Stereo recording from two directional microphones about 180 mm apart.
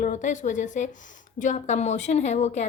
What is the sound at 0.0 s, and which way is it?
A woman's voice, 45° left (ahead or behind).